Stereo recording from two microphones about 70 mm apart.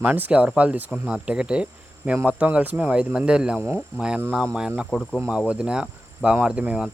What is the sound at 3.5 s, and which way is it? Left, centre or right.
Speech, right.